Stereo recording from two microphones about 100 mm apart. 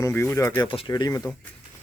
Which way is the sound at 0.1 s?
20° left (ahead or behind).